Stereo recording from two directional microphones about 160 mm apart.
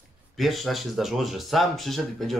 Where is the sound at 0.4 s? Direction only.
Centre (ahead or behind).